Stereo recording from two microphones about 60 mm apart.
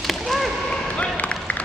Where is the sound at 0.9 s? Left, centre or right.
Left.